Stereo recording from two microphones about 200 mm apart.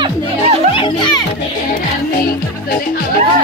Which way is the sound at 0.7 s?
25° left (ahead or behind).